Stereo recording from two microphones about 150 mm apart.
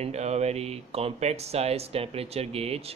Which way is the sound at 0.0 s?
45° right (ahead or behind).